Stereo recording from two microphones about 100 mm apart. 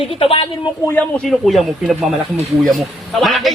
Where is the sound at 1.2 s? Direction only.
Centre (ahead or behind).